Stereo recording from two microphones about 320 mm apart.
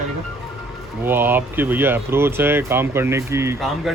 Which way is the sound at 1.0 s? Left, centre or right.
Centre.